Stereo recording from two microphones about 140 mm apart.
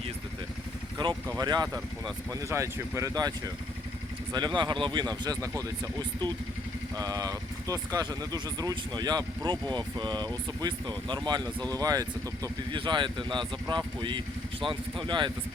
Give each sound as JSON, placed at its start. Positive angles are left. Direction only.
{"t": 1.3, "sound": "speech", "side_deg": -30}